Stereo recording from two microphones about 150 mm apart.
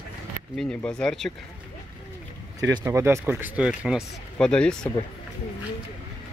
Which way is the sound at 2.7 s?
20° right (ahead or behind).